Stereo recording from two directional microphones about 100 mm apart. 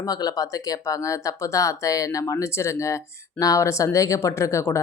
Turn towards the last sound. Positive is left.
turn(degrees=30)  # may be behind; listen again after turning